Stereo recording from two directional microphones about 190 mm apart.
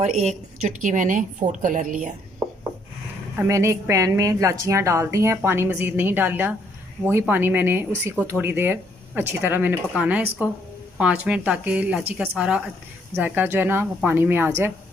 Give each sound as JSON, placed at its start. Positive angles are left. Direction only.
{"t": 0.0, "sound": "a woman's voice", "side_deg": -35}
{"t": 3.3, "sound": "a woman's voice", "side_deg": -15}